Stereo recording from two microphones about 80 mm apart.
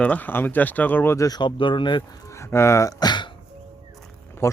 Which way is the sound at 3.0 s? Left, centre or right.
Left.